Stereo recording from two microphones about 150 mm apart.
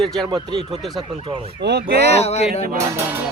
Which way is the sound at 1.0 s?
35° right (ahead or behind).